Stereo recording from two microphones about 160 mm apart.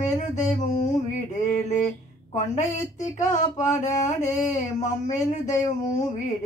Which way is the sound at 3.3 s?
50° left (ahead or behind).